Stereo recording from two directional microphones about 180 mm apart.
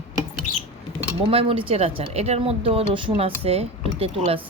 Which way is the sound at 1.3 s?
30° right (ahead or behind).